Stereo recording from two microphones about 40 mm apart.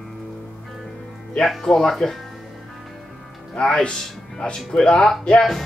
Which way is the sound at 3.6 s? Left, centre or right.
Centre.